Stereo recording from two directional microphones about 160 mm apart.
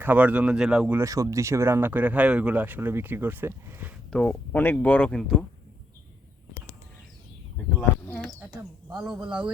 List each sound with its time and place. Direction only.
0.0 s speech: 10° right (ahead or behind)
4.1 s speech: 10° left (ahead or behind)
7.8 s bee: 10° left (ahead or behind)
9.2 s speech: 30° right (ahead or behind)